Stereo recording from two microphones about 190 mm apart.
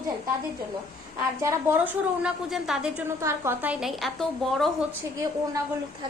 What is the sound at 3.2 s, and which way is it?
A woman's voice, 15° right (ahead or behind).